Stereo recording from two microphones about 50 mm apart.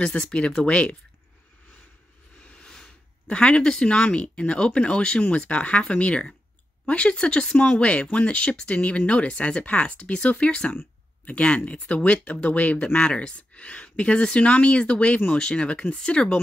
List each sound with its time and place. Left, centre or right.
0.3 s speech: left
2.4 s a sound: left
3.3 s speech: left